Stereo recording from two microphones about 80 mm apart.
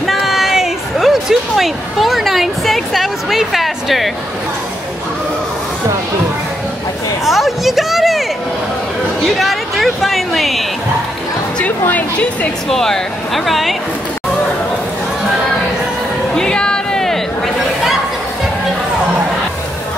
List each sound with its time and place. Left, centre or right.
0.0 s music: centre
7.2 s a woman's voice: centre
11.9 s speech: centre
12.6 s speech: centre
16.3 s music: centre